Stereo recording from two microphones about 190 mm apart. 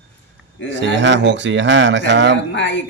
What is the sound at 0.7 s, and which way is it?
Speech, 70° right (ahead or behind).